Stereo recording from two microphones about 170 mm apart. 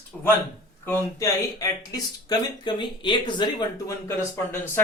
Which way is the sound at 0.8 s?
20° left (ahead or behind).